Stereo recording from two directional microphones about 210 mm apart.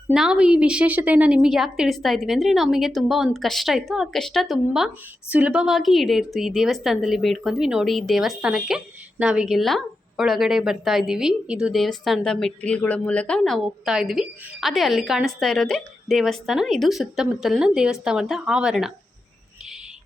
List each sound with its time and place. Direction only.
0.1 s speech: 5° right (ahead or behind)